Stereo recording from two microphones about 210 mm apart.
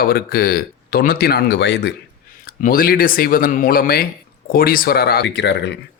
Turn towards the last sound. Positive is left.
turn(degrees=55)  # may be behind; listen again after turning